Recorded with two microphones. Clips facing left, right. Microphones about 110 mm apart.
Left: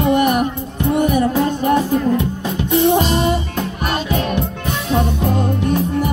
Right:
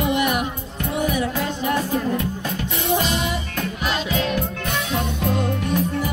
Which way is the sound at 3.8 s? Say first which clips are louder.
Left 3 dB; 55° left (ahead or behind).